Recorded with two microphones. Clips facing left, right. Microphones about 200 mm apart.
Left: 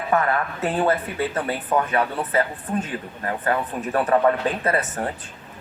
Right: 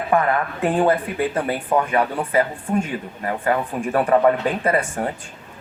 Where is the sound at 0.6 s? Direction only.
15° right (ahead or behind).